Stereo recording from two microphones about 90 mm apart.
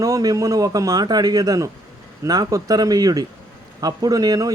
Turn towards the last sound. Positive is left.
turn(degrees=-45)  # may be behind; listen again after turning